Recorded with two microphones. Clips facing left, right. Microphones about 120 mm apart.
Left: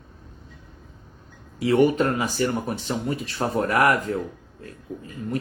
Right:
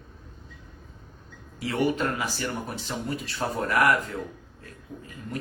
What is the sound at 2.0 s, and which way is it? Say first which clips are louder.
Speech: left 6 dB; 40° left (ahead or behind).